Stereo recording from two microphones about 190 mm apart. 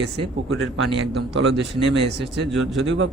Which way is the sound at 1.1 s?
75° right (ahead or behind).